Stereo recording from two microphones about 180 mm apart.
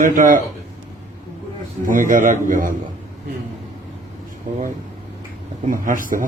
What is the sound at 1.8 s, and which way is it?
Speech, 50° right (ahead or behind).